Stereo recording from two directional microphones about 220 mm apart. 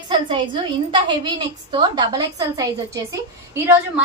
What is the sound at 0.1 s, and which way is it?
A woman's voice, 20° right (ahead or behind).